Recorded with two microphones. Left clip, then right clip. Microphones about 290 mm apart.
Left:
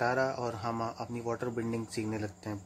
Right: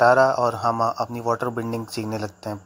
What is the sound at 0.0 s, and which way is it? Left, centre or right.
A man's voice, centre.